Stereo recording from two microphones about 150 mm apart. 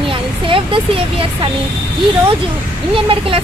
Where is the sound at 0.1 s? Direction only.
35° right (ahead or behind).